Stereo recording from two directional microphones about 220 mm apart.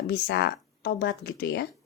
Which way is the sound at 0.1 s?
50° left (ahead or behind).